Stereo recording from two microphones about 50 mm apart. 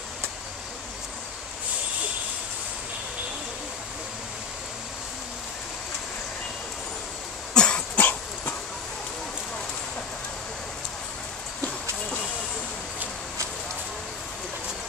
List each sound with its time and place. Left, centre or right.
7.5 s cough: centre
8.0 s dog: left